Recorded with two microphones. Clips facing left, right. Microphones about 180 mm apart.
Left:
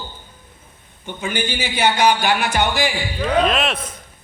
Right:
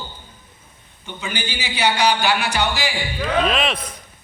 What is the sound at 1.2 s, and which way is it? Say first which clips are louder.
A man's voice: left 5 dB; 50° left (ahead or behind).